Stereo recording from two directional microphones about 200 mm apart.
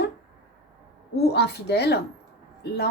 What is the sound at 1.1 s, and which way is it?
Speech, 55° left (ahead or behind).